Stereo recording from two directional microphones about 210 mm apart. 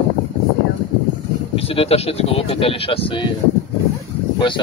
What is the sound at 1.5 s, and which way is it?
Speech, 25° left (ahead or behind).